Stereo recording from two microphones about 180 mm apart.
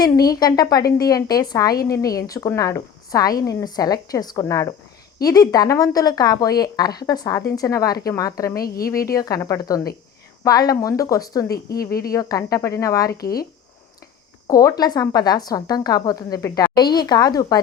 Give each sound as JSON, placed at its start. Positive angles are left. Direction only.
{"t": 0.0, "sound": "a woman's voice", "side_deg": 20}
{"t": 8.6, "sound": "a woman's voice", "side_deg": 55}
{"t": 9.1, "sound": "a woman's voice", "side_deg": 20}
{"t": 13.2, "sound": "a woman's voice", "side_deg": 55}
{"t": 14.4, "sound": "a woman's voice", "side_deg": 20}